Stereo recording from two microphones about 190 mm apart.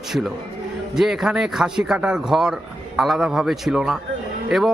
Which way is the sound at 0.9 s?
Centre (ahead or behind).